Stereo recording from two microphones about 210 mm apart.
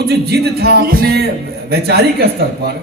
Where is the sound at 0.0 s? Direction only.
50° right (ahead or behind).